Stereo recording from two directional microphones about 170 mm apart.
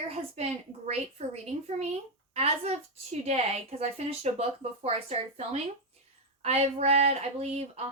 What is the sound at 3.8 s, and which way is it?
Speech, 40° right (ahead or behind).